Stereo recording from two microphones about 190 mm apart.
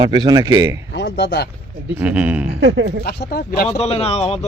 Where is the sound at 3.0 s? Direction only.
60° left (ahead or behind).